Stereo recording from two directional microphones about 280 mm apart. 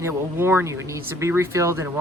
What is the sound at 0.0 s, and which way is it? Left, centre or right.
Speech, centre.